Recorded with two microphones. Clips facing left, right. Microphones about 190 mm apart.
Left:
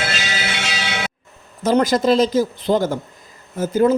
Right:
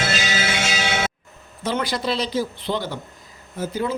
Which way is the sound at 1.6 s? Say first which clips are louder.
Left 9 dB; 45° left (ahead or behind).